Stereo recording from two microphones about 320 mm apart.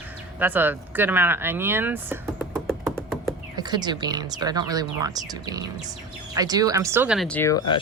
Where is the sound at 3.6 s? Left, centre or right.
Centre.